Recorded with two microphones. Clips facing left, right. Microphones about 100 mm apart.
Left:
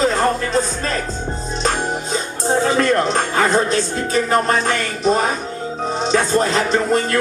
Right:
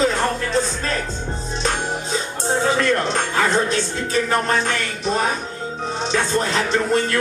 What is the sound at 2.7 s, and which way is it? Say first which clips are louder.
Speech: left 3 dB; 35° left (ahead or behind).